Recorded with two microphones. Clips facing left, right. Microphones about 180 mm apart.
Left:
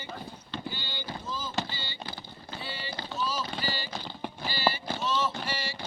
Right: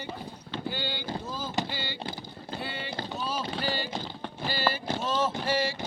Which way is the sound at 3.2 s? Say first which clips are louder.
Even; 55° right (ahead or behind).